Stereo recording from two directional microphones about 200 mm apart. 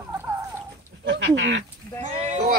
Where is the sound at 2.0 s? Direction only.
35° right (ahead or behind).